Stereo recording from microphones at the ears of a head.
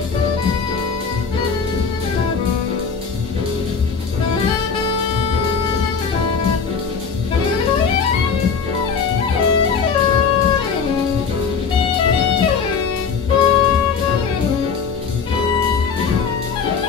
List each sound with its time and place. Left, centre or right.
7.6 s music: left